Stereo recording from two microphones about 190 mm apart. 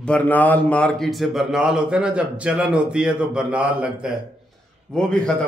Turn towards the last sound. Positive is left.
turn(degrees=5)  # may be behind; listen again after turning